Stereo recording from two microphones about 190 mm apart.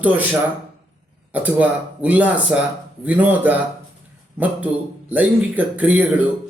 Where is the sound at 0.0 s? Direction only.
10° right (ahead or behind).